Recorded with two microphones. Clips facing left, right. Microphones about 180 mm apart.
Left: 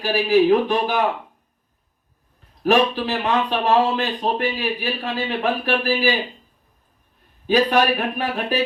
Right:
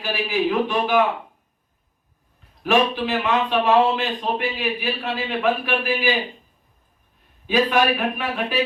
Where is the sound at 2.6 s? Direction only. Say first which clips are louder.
Left 2 dB; 40° left (ahead or behind).